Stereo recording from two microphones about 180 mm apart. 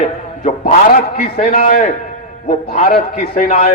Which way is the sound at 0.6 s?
45° left (ahead or behind).